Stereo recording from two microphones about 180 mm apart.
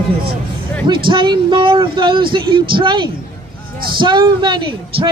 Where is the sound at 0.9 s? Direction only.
25° right (ahead or behind).